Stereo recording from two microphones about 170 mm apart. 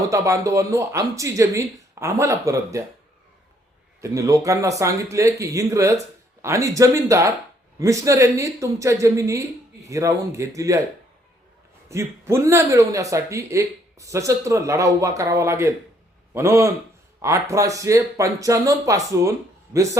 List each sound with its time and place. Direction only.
0.1 s a man's voice: 20° right (ahead or behind)
4.0 s speech: 20° right (ahead or behind)
11.9 s a man's voice: 15° right (ahead or behind)